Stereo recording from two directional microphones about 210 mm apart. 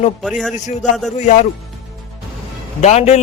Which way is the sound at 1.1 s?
35° left (ahead or behind).